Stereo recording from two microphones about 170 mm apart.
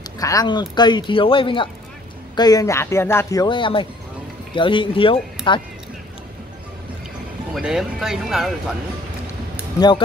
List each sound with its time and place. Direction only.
0.2 s speech: 20° left (ahead or behind)
7.5 s speech: 5° right (ahead or behind)
9.8 s speech: 25° left (ahead or behind)